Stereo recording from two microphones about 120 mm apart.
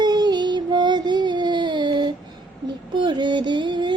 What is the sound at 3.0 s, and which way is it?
Music, 40° right (ahead or behind).